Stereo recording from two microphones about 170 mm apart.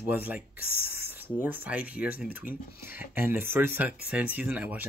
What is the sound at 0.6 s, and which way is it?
Speech, 60° left (ahead or behind).